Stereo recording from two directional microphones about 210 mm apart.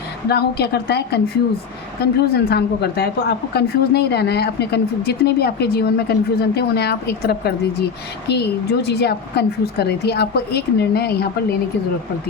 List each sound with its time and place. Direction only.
0.3 s a woman's voice: 50° left (ahead or behind)